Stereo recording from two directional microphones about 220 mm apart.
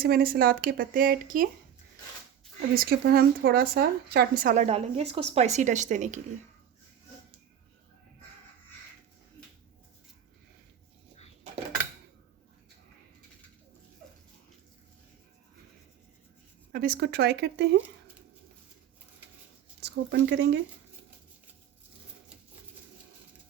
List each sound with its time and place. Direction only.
0.0 s speech: 40° right (ahead or behind)
2.6 s speech: 45° right (ahead or behind)
4.5 s a woman's voice: 30° right (ahead or behind)
16.7 s speech: 40° right (ahead or behind)
19.8 s speech: 50° right (ahead or behind)